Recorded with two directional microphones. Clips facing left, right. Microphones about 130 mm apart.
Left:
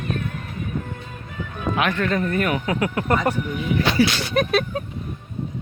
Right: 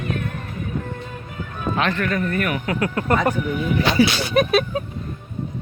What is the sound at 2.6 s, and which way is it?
Speech, 15° left (ahead or behind).